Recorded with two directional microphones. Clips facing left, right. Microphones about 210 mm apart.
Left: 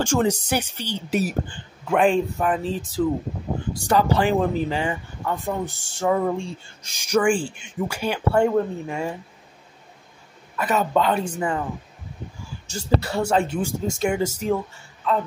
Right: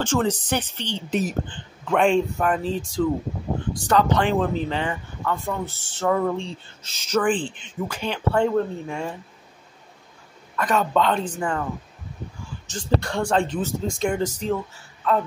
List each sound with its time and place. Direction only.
0.0 s speech: 10° left (ahead or behind)
10.5 s speech: 10° left (ahead or behind)
12.6 s speech: 10° left (ahead or behind)